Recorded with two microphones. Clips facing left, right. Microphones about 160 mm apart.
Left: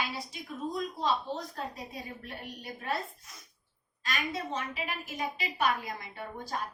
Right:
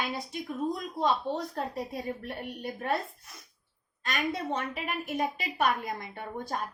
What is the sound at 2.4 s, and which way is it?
Speech, 55° right (ahead or behind).